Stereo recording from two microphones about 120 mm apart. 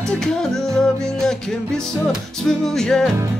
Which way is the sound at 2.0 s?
5° left (ahead or behind).